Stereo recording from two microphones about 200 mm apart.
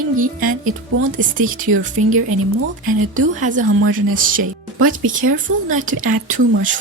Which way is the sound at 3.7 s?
85° right.